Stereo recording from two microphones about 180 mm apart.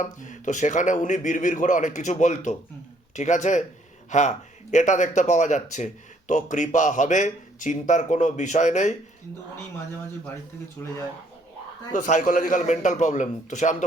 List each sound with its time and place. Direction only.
0.0 s a man's voice: 45° left (ahead or behind)
10.8 s speech: 15° left (ahead or behind)
11.9 s a man's voice: 45° left (ahead or behind)